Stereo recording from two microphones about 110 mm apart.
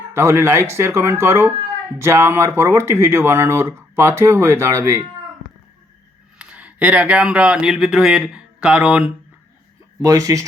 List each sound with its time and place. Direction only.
0.1 s speech: 25° right (ahead or behind)
6.4 s speech: 10° right (ahead or behind)
10.0 s speech: 30° right (ahead or behind)